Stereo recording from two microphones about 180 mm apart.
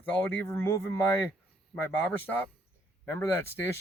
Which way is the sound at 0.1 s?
10° left (ahead or behind).